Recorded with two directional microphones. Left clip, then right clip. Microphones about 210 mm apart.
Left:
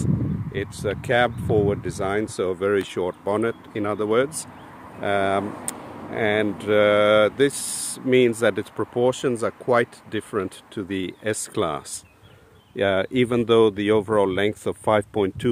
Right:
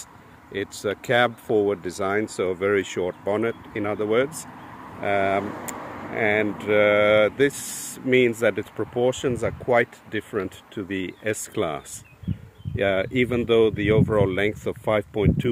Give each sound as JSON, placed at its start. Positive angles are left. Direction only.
{"t": 0.0, "sound": "speech", "side_deg": 5}